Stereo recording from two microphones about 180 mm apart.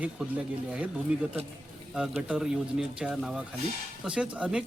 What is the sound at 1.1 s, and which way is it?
Speech, 5° right (ahead or behind).